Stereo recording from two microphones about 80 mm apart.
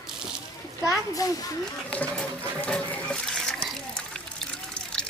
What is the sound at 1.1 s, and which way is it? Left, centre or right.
Speech, left.